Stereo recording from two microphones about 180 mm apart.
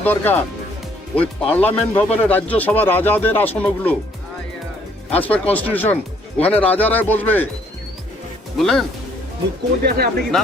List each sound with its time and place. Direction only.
0.0 s speech: 10° left (ahead or behind)
5.1 s speech: 10° left (ahead or behind)
8.5 s speech: centre (ahead or behind)
9.8 s speech: 60° right (ahead or behind)